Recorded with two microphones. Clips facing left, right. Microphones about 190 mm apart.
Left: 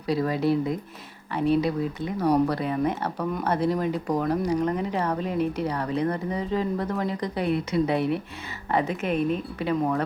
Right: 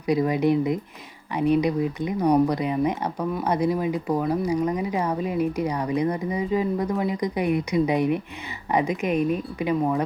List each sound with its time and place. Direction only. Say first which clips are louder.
0.1 s speech: right 3 dB; 15° right (ahead or behind)